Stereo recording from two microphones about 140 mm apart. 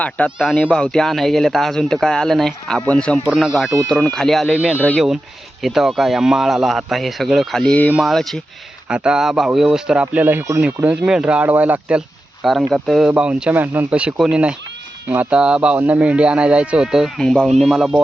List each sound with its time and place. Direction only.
0.3 s speech: 5° left (ahead or behind)
3.2 s speech: 5° right (ahead or behind)
4.4 s speech: 10° right (ahead or behind)
11.0 s speech: 5° right (ahead or behind)